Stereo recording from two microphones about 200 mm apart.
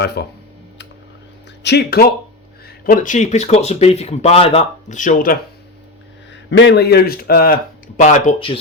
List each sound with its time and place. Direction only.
0.0 s speech: 55° left (ahead or behind)
1.6 s speech: 55° left (ahead or behind)
6.3 s speech: 65° left (ahead or behind); by 8.4 s 40° left (ahead or behind)